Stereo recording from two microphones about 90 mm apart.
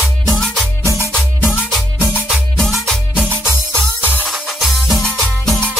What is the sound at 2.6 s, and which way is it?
Music, 5° left (ahead or behind).